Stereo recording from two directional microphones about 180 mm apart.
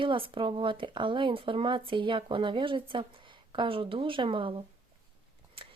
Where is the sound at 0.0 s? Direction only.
30° right (ahead or behind).